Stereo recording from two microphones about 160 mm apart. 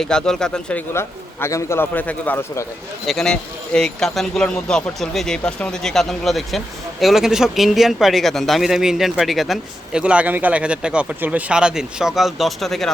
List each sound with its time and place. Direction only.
0.0 s speech: 5° left (ahead or behind)
0.9 s a man's voice: 15° left (ahead or behind)
3.1 s speech: 5° left (ahead or behind)